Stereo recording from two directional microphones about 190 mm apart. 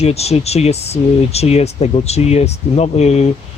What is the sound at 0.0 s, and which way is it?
Speech, 35° left (ahead or behind).